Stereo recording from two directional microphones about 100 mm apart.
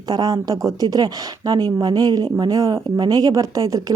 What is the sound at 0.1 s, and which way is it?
Speech, 40° right (ahead or behind).